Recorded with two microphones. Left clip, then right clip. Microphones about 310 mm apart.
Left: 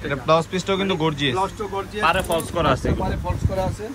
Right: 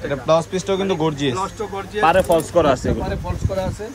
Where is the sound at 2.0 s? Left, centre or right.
Right.